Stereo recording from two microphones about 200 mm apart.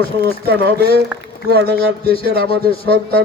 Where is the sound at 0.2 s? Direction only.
55° right (ahead or behind).